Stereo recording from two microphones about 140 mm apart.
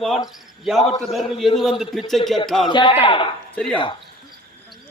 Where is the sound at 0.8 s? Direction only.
45° left (ahead or behind).